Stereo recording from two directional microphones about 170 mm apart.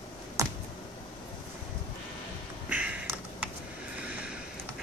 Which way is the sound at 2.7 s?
10° right (ahead or behind).